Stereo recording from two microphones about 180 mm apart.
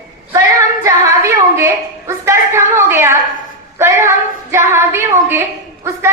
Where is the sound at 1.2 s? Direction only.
15° right (ahead or behind).